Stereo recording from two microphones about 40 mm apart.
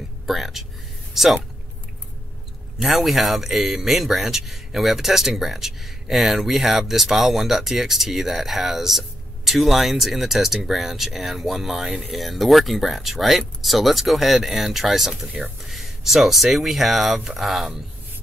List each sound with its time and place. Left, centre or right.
0.3 s speech: centre
2.8 s speech: centre